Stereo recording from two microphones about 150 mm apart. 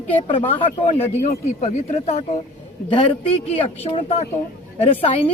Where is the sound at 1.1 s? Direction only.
50° left (ahead or behind).